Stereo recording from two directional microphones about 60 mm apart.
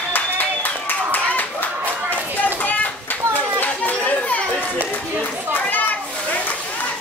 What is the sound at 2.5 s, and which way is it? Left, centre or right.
Children playing, left.